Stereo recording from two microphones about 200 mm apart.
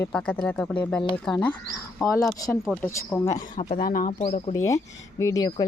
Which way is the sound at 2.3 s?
20° left (ahead or behind).